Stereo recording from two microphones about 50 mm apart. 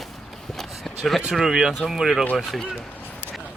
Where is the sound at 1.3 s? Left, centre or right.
Centre.